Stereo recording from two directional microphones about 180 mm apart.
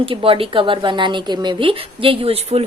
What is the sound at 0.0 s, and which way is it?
A woman's voice, 30° right (ahead or behind).